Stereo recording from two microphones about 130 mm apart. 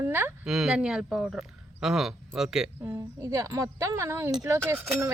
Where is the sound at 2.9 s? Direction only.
20° right (ahead or behind).